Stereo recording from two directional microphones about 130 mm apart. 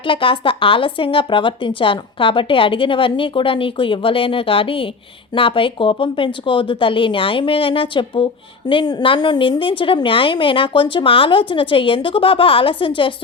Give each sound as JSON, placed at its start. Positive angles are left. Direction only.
{"t": 0.0, "sound": "a woman's voice", "side_deg": 40}